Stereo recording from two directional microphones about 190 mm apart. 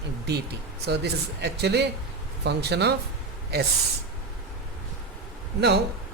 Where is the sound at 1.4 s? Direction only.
60° right (ahead or behind).